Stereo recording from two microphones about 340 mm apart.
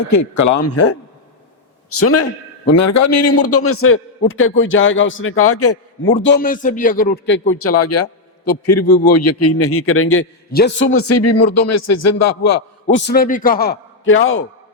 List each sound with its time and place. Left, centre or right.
0.1 s a man's voice: left
2.6 s a man's voice: left
6.2 s a man's voice: left
7.5 s a man's voice: left
8.8 s a man's voice: left
9.1 s a man's voice: left
10.9 s a man's voice: left
12.9 s a man's voice: left